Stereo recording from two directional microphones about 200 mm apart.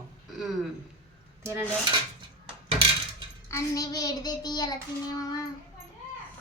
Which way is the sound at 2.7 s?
25° right (ahead or behind).